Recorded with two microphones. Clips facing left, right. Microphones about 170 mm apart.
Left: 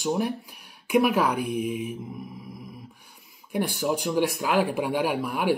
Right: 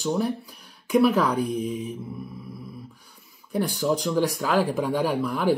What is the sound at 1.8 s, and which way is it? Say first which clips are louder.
Mantra: even; 15° left (ahead or behind).